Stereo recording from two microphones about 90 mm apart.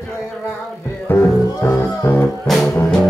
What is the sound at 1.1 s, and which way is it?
Music, 20° left (ahead or behind).